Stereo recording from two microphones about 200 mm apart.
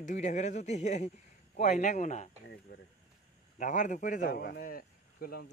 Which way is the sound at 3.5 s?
40° left (ahead or behind).